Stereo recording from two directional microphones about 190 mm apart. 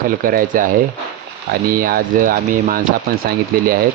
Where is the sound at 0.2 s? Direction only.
50° right (ahead or behind).